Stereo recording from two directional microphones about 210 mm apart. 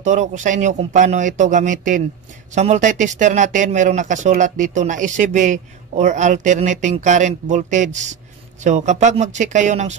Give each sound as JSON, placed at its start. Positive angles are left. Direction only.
{"t": 0.0, "sound": "speech", "side_deg": -35}